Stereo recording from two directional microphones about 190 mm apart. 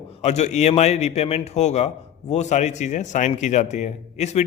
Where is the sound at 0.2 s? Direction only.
35° left (ahead or behind).